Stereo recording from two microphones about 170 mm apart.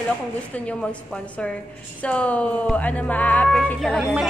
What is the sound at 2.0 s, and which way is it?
Speech, 10° left (ahead or behind).